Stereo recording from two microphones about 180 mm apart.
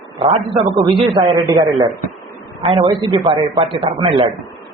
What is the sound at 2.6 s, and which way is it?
A man's voice, 30° right (ahead or behind).